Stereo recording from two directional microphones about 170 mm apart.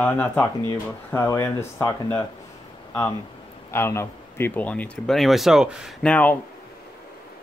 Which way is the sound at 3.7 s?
15° left (ahead or behind).